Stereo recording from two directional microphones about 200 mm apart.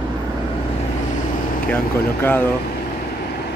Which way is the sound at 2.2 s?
10° left (ahead or behind).